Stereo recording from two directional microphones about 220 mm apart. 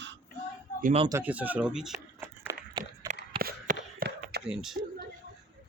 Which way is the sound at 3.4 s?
40° right (ahead or behind).